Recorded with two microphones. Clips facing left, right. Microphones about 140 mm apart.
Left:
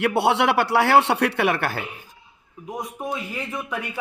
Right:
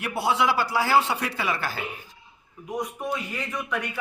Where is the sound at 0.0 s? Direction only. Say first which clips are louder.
Left 5 dB; 75° left (ahead or behind).